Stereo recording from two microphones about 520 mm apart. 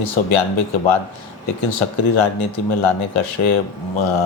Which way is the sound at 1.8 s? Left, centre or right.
Left.